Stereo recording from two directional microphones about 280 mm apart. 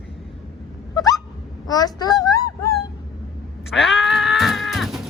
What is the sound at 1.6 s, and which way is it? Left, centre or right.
Speech, centre.